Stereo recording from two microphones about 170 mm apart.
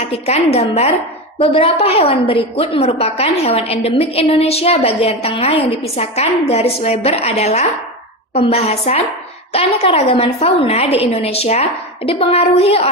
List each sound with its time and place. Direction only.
0.3 s a woman's voice: 40° left (ahead or behind)